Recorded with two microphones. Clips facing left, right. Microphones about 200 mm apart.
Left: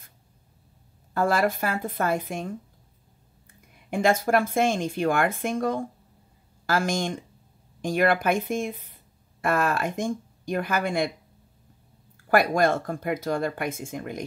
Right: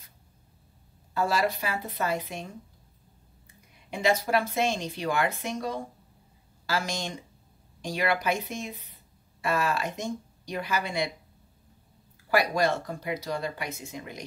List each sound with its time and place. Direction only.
1.1 s speech: 50° left (ahead or behind)
12.3 s speech: 50° left (ahead or behind)